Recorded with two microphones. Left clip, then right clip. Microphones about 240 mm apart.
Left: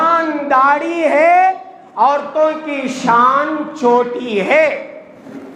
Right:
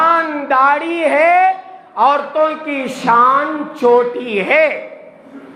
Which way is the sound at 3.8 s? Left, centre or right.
Right.